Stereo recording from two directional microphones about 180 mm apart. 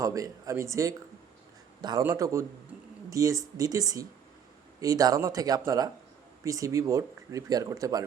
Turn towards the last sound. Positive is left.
turn(degrees=-20)  # may be behind; listen again after turning